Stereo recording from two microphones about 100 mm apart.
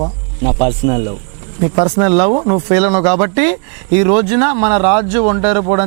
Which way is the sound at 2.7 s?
10° right (ahead or behind).